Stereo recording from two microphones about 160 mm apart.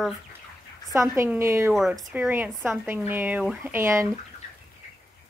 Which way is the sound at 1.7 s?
Centre (ahead or behind).